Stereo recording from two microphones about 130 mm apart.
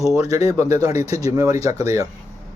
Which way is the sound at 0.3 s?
25° right (ahead or behind).